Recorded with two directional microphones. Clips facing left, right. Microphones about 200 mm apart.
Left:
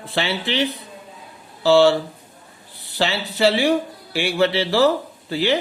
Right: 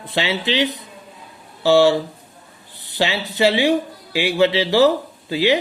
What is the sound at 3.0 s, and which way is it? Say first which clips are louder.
Speech: right 1 dB; 15° right (ahead or behind).